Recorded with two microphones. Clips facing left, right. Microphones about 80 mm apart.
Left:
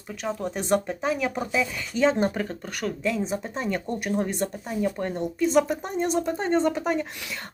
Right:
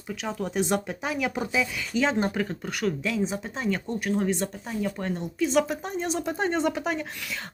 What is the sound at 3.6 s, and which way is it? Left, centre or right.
Speech, centre.